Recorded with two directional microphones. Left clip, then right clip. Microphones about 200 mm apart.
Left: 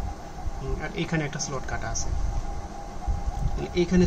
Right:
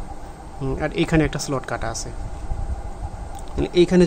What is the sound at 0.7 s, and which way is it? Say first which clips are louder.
Speech: right 10 dB; 50° right (ahead or behind).